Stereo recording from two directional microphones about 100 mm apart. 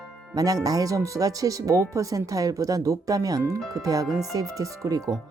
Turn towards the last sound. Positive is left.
turn(degrees=-40)  # may be behind; listen again after turning